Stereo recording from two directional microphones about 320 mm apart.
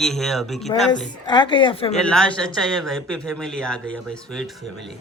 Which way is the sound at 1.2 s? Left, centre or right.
Centre.